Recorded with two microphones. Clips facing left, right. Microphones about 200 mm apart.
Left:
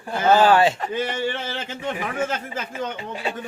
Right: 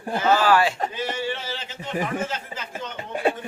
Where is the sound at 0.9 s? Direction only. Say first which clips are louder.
Left 3 dB; 55° left (ahead or behind).